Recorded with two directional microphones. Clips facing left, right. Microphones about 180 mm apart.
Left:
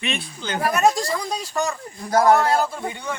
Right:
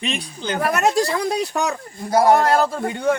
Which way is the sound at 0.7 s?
70° right (ahead or behind).